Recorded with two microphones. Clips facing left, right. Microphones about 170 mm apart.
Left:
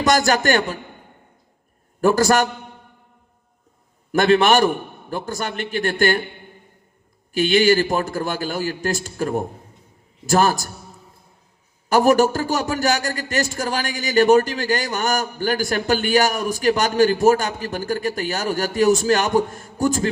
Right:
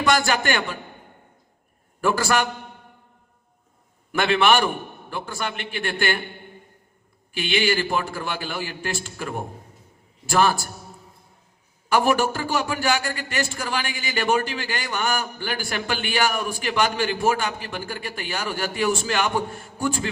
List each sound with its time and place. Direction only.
0.0 s a man's voice: 40° left (ahead or behind)
2.0 s a man's voice: 40° left (ahead or behind)
4.1 s a man's voice: 40° left (ahead or behind)
7.3 s a man's voice: 40° left (ahead or behind)
11.9 s a man's voice: 40° left (ahead or behind)